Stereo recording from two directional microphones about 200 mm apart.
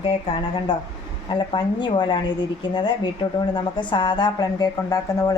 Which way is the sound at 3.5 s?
20° left (ahead or behind).